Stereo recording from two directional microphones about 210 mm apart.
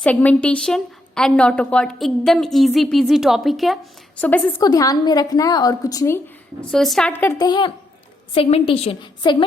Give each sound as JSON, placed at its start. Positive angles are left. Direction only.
{"t": 0.0, "sound": "a woman's voice", "side_deg": 5}
{"t": 6.6, "sound": "a woman's voice", "side_deg": 0}